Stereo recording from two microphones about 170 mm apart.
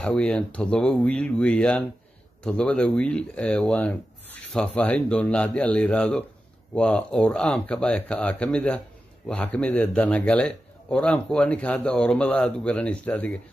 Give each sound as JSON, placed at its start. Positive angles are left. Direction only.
{"t": 0.0, "sound": "speech", "side_deg": 5}